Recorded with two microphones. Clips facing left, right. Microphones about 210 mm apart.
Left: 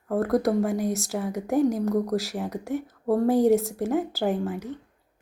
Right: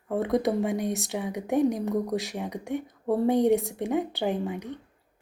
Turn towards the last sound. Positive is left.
turn(degrees=5)  # may be behind; listen again after turning